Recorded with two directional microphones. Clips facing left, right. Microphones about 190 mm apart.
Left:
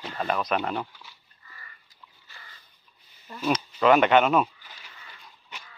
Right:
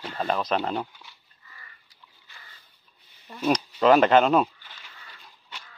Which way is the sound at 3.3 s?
35° right (ahead or behind).